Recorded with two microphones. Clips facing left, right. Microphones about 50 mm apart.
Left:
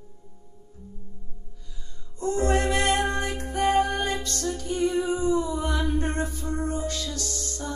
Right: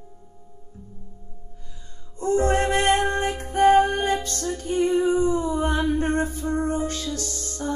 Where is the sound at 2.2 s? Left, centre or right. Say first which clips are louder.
Right 3 dB; right.